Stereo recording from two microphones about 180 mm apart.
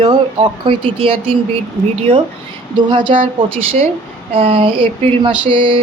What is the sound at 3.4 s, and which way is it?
Speech, 30° right (ahead or behind).